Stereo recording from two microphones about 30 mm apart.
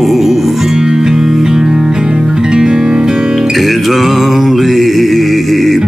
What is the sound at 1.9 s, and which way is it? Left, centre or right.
Music, right.